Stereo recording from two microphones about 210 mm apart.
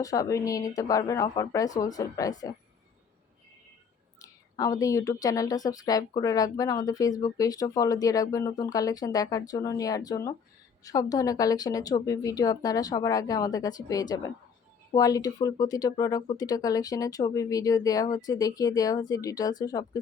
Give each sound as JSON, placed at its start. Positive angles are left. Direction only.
{"t": 0.0, "sound": "speech", "side_deg": 15}
{"t": 4.2, "sound": "speech", "side_deg": 15}